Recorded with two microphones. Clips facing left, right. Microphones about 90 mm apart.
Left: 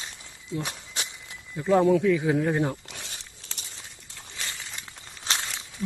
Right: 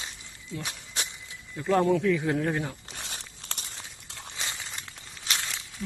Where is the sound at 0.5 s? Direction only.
20° left (ahead or behind).